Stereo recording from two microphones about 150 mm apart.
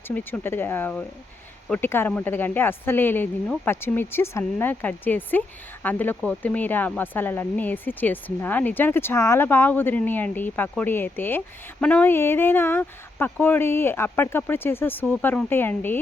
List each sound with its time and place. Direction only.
0.1 s speech: 10° left (ahead or behind)